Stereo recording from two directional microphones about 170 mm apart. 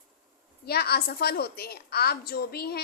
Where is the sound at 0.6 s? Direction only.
70° left (ahead or behind).